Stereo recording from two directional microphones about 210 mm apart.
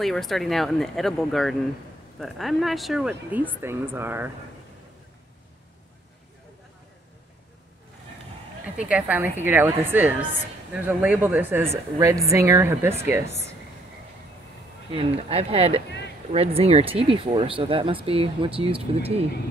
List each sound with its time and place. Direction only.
0.0 s speech: centre (ahead or behind)
8.7 s a woman's voice: 5° right (ahead or behind)
14.9 s speech: 25° right (ahead or behind)